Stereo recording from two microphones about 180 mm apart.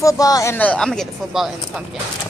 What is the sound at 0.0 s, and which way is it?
Speech, 20° left (ahead or behind).